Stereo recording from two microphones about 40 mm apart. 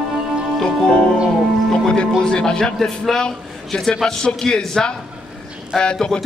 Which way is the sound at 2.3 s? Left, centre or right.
Left.